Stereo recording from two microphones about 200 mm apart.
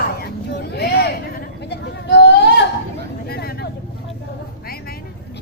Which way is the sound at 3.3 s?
50° left (ahead or behind).